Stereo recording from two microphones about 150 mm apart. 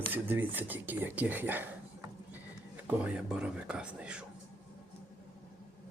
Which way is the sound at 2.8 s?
5° right (ahead or behind).